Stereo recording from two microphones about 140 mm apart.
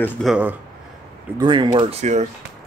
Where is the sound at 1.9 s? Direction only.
55° right (ahead or behind).